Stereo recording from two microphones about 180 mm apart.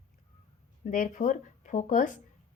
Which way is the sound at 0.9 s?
45° left (ahead or behind).